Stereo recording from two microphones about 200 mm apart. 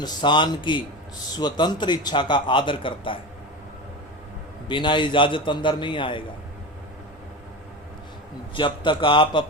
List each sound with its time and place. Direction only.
0.0 s a man's voice: 20° left (ahead or behind)
4.7 s a man's voice: 25° left (ahead or behind)
8.5 s a man's voice: 25° left (ahead or behind)